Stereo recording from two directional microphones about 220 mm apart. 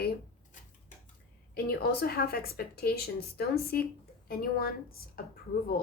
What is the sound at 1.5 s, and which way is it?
Speech, 45° left (ahead or behind).